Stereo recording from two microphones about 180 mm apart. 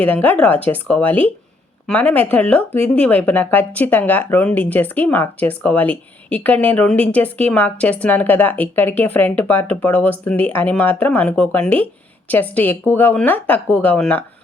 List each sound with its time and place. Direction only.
0.0 s speech: 10° left (ahead or behind)